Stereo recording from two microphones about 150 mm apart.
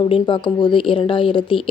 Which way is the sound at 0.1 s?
35° left (ahead or behind).